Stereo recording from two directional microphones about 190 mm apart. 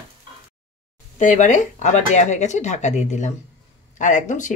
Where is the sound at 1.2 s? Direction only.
40° left (ahead or behind).